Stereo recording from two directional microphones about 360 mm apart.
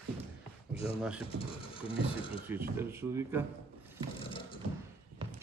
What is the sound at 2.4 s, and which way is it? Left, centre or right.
Speech, centre.